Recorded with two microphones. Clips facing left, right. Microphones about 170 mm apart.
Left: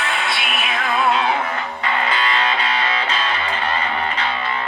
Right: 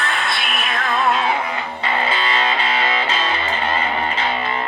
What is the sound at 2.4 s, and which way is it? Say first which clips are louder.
Music: right 1 dB; 30° right (ahead or behind).